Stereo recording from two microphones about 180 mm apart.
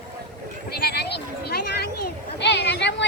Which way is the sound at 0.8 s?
65° left (ahead or behind).